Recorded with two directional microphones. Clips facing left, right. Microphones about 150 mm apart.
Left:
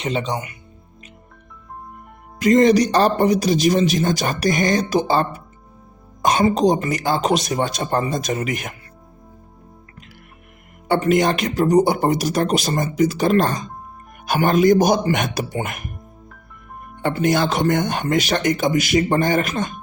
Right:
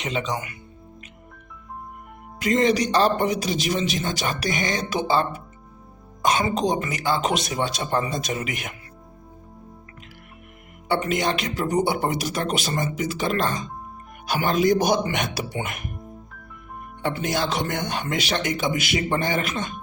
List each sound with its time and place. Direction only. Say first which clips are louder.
0.0 s a man's voice: left 4 dB; 35° left (ahead or behind)
2.4 s a man's voice: left 7 dB; 40° left (ahead or behind)
10.8 s a man's voice: left 6 dB; 45° left (ahead or behind)
17.0 s speech: left 6 dB; 50° left (ahead or behind)